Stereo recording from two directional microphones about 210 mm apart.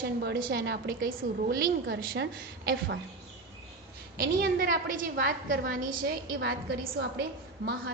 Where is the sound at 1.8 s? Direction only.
55° right (ahead or behind).